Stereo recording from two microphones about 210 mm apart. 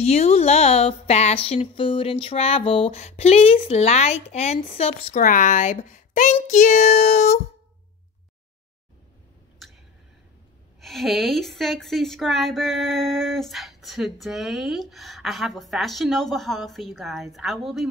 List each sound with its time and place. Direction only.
0.0 s speech: 30° left (ahead or behind)
9.6 s a sound: centre (ahead or behind)
10.8 s speech: centre (ahead or behind)